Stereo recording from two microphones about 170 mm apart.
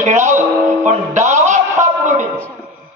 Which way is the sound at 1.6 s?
45° right (ahead or behind).